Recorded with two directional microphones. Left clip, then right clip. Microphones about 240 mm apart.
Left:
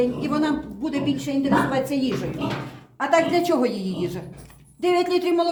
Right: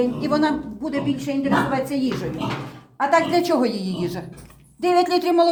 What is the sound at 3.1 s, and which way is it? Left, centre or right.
Speech, right.